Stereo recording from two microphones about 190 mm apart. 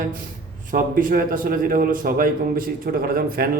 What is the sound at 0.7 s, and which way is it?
A man's voice, 45° right (ahead or behind).